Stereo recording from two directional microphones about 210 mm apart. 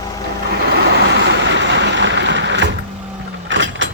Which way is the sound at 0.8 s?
55° right (ahead or behind).